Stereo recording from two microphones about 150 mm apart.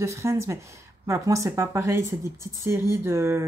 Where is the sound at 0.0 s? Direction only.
20° right (ahead or behind).